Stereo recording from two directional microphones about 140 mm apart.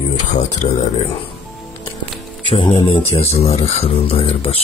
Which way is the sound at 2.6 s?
40° left (ahead or behind).